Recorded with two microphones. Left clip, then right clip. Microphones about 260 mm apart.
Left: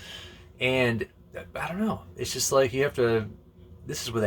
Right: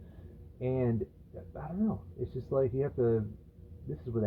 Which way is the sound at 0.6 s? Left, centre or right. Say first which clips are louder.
Left 9 dB; centre.